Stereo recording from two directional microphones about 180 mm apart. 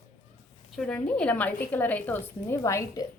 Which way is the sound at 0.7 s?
5° left (ahead or behind).